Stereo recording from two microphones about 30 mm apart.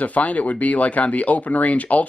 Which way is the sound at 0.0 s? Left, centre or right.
Left.